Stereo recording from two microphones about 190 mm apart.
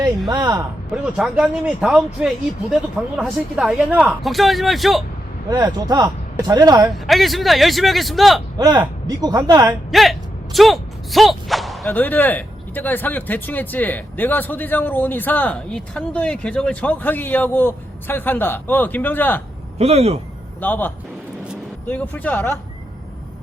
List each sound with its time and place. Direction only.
0.3 s speech: 20° right (ahead or behind)
1.1 s speech: 5° right (ahead or behind)
5.5 s speech: 20° right (ahead or behind)
6.9 s speech: centre (ahead or behind)
8.5 s speech: 20° right (ahead or behind)
9.9 s speech: centre (ahead or behind)
19.8 s speech: 35° right (ahead or behind)
20.6 s speech: 10° left (ahead or behind)